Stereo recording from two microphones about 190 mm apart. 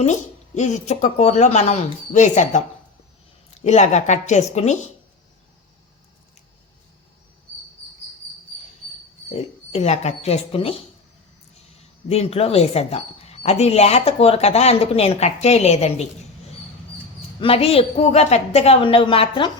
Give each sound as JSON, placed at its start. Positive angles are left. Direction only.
{"t": 0.0, "sound": "speech", "side_deg": 35}
{"t": 9.7, "sound": "speech", "side_deg": 35}
{"t": 12.0, "sound": "speech", "side_deg": 35}
{"t": 17.4, "sound": "speech", "side_deg": 30}